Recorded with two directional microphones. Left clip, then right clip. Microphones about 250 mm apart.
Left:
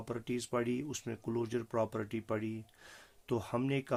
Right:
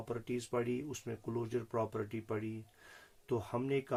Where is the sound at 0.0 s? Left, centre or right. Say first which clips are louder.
Left 1 dB; left.